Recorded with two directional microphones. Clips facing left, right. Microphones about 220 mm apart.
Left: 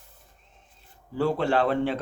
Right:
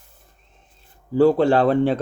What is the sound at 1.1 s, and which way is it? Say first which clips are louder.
Speech: right 9 dB; 35° right (ahead or behind).